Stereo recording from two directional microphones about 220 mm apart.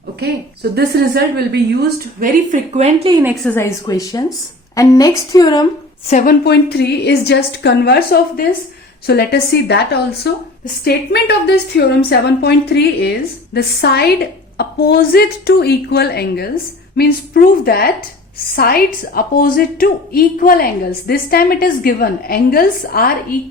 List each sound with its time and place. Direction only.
0.2 s speech: 45° right (ahead or behind)
2.2 s speech: 35° right (ahead or behind)
3.4 s a woman's voice: 10° left (ahead or behind)
6.1 s a woman's voice: 35° left (ahead or behind)
6.4 s a woman's voice: 50° left (ahead or behind)